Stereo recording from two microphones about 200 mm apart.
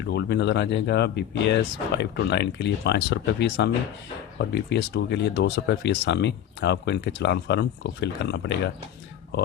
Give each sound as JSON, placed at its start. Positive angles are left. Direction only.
{"t": 0.0, "sound": "speech", "side_deg": 55}